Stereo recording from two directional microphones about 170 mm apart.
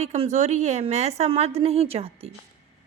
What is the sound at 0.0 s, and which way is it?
A woman's voice, 40° right (ahead or behind).